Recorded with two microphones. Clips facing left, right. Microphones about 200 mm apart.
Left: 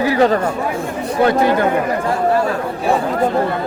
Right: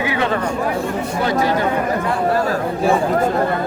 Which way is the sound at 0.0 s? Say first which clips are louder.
Left 6 dB; 40° left (ahead or behind).